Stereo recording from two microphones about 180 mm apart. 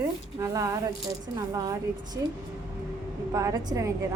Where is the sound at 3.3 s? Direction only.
20° right (ahead or behind).